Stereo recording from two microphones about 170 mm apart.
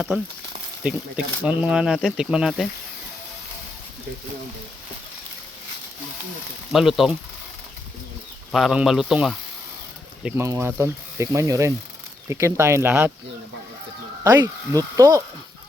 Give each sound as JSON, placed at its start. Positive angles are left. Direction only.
{"t": 0.9, "sound": "speech", "side_deg": -5}
{"t": 6.7, "sound": "speech", "side_deg": 0}
{"t": 8.5, "sound": "speech", "side_deg": 0}
{"t": 10.2, "sound": "speech", "side_deg": -15}
{"t": 14.3, "sound": "speech", "side_deg": -20}